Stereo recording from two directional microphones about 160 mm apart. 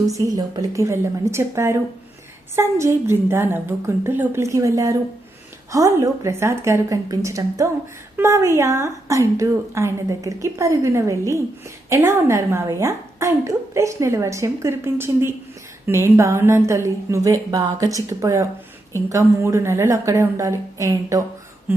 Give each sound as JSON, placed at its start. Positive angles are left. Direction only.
{"t": 0.1, "sound": "a woman's voice", "side_deg": -20}